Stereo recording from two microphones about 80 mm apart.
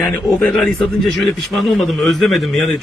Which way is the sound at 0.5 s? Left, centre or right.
Centre.